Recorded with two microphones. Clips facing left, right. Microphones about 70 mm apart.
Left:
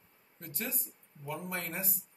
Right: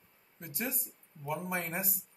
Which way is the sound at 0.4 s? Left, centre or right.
Centre.